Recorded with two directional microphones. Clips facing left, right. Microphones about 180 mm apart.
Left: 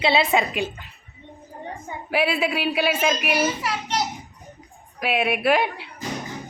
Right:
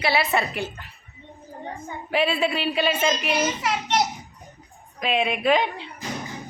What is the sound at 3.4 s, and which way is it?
Speech, 20° right (ahead or behind).